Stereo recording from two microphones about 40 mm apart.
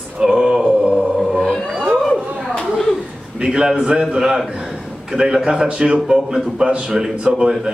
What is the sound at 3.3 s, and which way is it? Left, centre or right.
A man's voice, right.